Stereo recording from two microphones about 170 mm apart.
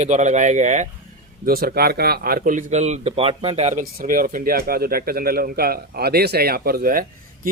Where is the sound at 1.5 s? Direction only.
60° right (ahead or behind); by 3.8 s 40° right (ahead or behind).